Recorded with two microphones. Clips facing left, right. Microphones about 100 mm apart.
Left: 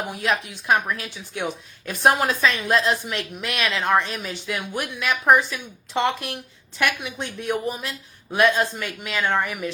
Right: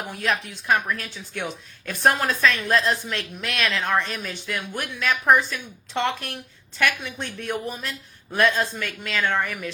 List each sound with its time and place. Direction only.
0.0 s a woman's voice: 15° left (ahead or behind)